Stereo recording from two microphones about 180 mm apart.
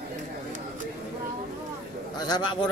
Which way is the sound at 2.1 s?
20° left (ahead or behind).